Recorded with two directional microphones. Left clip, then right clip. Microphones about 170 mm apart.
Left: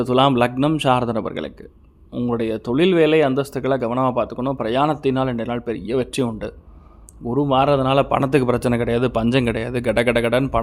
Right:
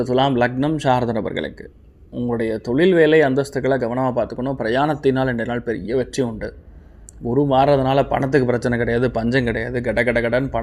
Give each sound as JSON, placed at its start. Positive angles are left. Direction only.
{"t": 0.0, "sound": "speech", "side_deg": 25}
{"t": 2.1, "sound": "speech", "side_deg": 25}
{"t": 7.3, "sound": "speech", "side_deg": 10}